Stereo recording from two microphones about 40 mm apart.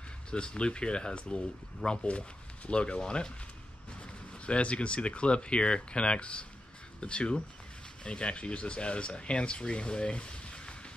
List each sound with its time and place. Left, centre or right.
0.3 s speech: left
4.5 s speech: left